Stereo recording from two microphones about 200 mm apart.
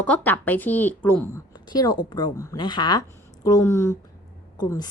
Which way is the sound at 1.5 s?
20° left (ahead or behind).